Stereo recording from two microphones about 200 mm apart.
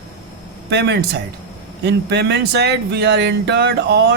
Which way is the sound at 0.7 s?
55° right (ahead or behind).